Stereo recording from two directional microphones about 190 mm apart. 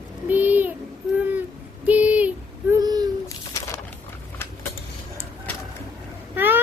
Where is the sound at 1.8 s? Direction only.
5° right (ahead or behind).